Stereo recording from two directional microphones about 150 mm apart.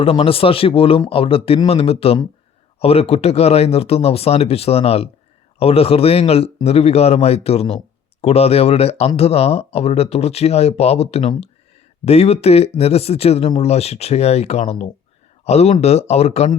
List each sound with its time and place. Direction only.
0.0 s a man's voice: 40° left (ahead or behind)